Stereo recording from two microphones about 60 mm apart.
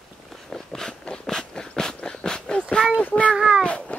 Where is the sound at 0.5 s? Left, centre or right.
Centre.